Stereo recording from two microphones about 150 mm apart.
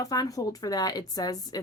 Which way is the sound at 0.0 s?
25° left (ahead or behind).